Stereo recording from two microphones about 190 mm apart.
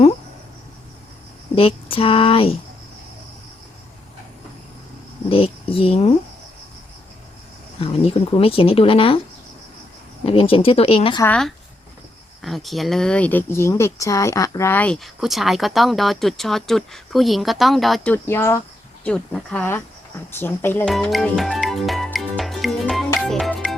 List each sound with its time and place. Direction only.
1.5 s speech: 30° left (ahead or behind)
5.3 s a sound: 30° left (ahead or behind)
7.8 s speech: 30° left (ahead or behind)
10.2 s speech: 30° left (ahead or behind)
11.2 s speech: 5° left (ahead or behind)
20.9 s music: centre (ahead or behind)